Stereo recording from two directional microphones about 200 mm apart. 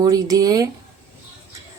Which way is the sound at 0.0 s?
20° right (ahead or behind).